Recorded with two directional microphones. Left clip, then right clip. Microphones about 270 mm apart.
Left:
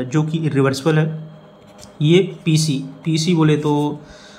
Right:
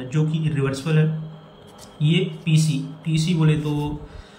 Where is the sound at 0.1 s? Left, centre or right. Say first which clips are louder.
Left 5 dB; centre.